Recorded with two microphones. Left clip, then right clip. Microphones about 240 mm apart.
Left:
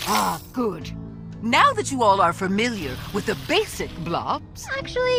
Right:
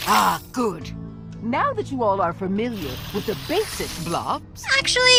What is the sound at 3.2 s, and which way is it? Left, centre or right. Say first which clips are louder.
Speech: left 2 dB; left.